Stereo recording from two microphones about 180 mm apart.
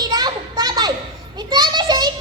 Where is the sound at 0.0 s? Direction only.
25° right (ahead or behind).